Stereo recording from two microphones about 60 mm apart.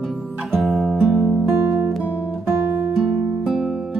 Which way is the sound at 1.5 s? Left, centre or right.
Right.